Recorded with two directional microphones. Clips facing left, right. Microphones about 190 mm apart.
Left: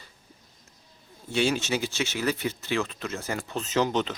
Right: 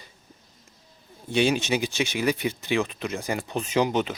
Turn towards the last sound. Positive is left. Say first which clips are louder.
# right 2 dB
turn(degrees=-10)  # may be behind; listen again after turning